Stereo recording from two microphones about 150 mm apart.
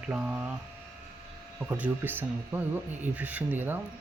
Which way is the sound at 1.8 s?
10° right (ahead or behind).